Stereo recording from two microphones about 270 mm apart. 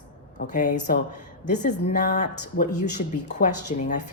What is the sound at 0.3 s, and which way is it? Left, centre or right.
Speech, left.